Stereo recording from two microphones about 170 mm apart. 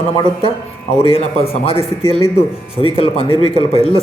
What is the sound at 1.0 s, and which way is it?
A man's voice, 35° left (ahead or behind).